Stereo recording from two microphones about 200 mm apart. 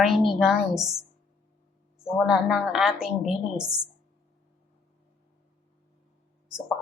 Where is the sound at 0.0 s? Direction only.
Centre (ahead or behind).